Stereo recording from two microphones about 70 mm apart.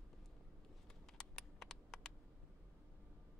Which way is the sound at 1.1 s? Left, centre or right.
Centre.